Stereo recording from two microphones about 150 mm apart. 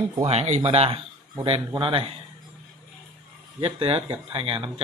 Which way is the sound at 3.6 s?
40° right (ahead or behind).